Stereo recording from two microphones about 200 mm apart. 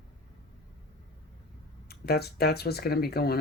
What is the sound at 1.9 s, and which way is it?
Speech, 50° left (ahead or behind).